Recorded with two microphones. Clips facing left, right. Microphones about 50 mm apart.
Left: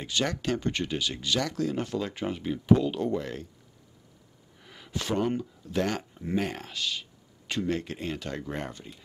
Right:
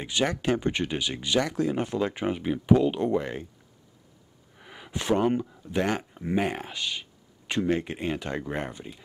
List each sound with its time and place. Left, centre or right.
0.0 s speech: centre
4.6 s speech: right